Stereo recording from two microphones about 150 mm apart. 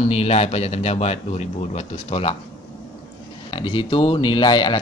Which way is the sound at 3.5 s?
35° left (ahead or behind).